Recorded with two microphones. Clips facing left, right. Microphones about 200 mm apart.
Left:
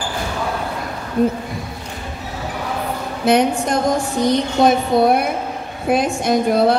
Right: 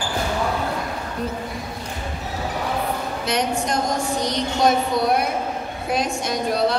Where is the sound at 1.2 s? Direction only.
50° left (ahead or behind).